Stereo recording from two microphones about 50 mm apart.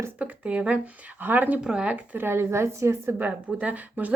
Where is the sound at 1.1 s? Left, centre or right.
Right.